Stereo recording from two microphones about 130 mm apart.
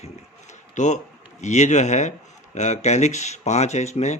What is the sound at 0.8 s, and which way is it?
Speech, 70° left (ahead or behind).